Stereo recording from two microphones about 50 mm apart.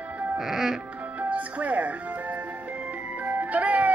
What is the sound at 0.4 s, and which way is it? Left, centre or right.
Music, centre.